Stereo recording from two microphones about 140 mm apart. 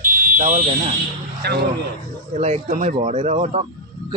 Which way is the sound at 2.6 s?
70° right (ahead or behind).